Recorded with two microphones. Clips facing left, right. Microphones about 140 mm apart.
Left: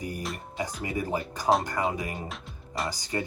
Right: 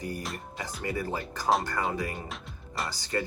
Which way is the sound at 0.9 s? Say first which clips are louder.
Left 1 dB; 15° left (ahead or behind).